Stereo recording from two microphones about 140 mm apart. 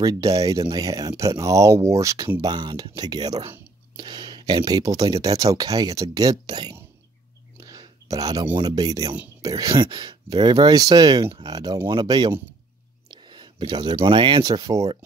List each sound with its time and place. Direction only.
0.0 s speech: 25° right (ahead or behind)
7.6 s whispering: 25° right (ahead or behind)
8.5 s speech: 25° right (ahead or behind)
13.1 s a sound: 35° right (ahead or behind)
14.0 s speech: 35° right (ahead or behind)